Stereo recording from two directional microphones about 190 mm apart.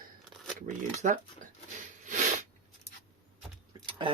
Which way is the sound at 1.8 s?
40° right (ahead or behind).